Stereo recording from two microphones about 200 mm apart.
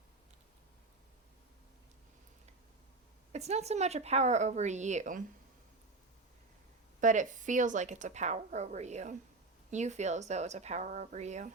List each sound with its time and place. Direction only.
3.3 s a woman's voice: 35° right (ahead or behind)
7.0 s a woman's voice: 40° right (ahead or behind)